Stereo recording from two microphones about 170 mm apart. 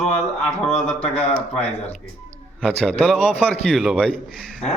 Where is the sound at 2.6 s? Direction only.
5° left (ahead or behind).